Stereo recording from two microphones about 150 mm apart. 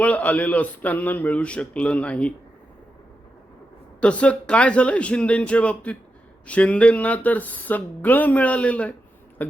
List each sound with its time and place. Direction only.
0.0 s speech: 10° left (ahead or behind)
4.0 s speech: 10° left (ahead or behind)
9.4 s a sound: 10° left (ahead or behind)